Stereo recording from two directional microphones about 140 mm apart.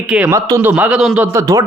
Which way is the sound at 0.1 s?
10° right (ahead or behind).